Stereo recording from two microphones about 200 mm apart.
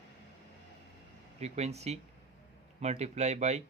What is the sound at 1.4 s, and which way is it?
Speech, 30° right (ahead or behind).